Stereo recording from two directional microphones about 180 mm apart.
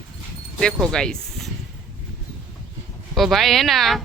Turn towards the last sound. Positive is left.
turn(degrees=0)  # may be behind; listen again after turning